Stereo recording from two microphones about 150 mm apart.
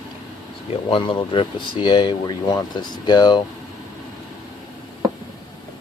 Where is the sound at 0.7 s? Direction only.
35° left (ahead or behind).